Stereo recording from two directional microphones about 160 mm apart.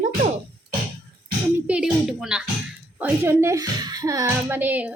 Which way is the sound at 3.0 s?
15° right (ahead or behind).